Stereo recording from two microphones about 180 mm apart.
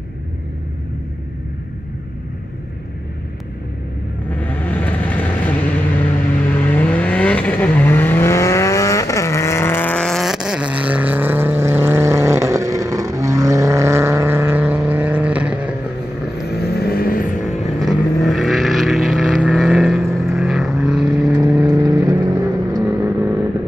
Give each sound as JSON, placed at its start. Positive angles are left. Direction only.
{"t": 4.3, "sound": "vehicle", "side_deg": 10}
{"t": 6.6, "sound": "vehicle", "side_deg": 10}
{"t": 16.4, "sound": "vehicle", "side_deg": 60}
{"t": 17.7, "sound": "vehicle", "side_deg": 0}
{"t": 21.7, "sound": "vehicle", "side_deg": -25}
{"t": 22.8, "sound": "vehicle", "side_deg": -10}